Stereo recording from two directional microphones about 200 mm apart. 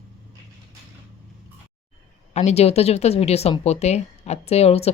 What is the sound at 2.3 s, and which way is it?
Speech, 35° left (ahead or behind).